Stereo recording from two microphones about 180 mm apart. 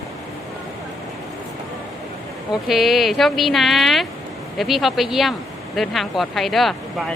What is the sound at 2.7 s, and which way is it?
Speech, centre (ahead or behind).